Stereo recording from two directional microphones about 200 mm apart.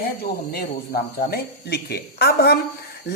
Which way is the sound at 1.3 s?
55° left (ahead or behind).